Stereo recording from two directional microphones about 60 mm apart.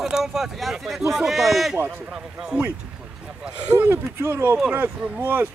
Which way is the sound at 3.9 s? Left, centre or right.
Right.